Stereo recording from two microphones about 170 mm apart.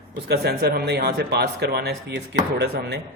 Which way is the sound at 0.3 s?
65° right (ahead or behind).